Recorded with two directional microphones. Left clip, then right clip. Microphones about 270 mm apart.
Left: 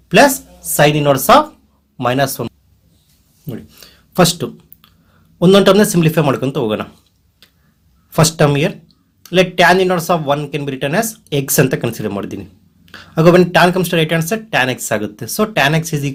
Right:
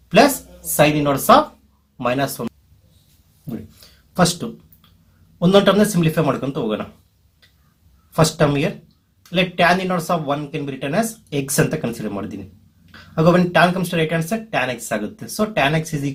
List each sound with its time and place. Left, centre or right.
1.3 s speech: left
3.8 s a sound: left
5.4 s speech: left
8.1 s speech: left